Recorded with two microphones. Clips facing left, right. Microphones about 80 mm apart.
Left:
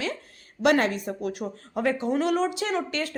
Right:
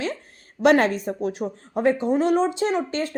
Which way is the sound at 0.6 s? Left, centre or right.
Right.